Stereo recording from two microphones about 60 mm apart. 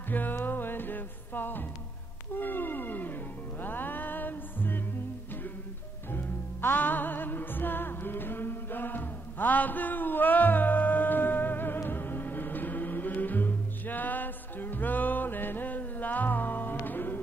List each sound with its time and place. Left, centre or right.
0.1 s music: left
6.1 s music: left